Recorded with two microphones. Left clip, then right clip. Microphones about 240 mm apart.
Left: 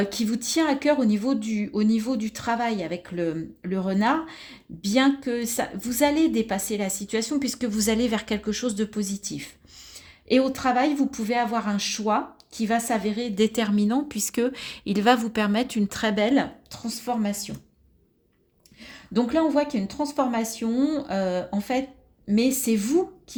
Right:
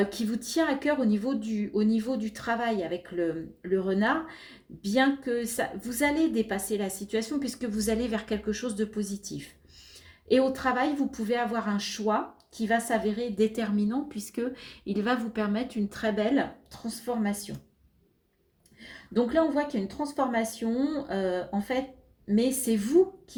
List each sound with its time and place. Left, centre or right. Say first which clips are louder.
0.0 s speech: left 3 dB; left
18.8 s speech: left 2 dB; left